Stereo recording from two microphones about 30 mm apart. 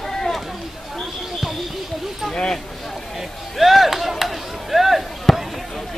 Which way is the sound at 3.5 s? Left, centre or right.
Centre.